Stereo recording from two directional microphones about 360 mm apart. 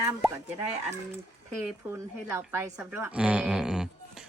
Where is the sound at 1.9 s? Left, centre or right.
Centre.